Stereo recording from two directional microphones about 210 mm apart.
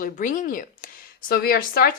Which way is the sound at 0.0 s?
40° left (ahead or behind).